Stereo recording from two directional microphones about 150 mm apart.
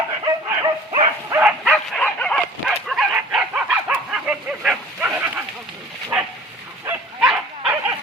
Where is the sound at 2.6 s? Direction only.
Centre (ahead or behind).